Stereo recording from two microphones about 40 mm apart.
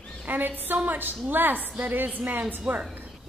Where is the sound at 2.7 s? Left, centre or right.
Right.